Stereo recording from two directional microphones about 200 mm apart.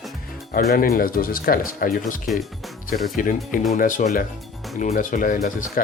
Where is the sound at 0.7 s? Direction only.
50° left (ahead or behind).